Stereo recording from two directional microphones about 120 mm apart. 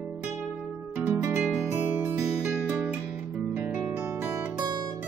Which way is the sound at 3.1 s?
15° right (ahead or behind).